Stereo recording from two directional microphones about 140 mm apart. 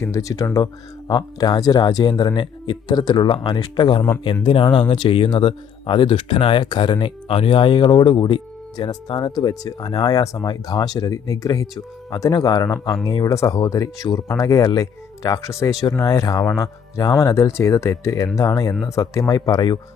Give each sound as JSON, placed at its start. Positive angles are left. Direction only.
{"t": 0.0, "sound": "speech", "side_deg": 25}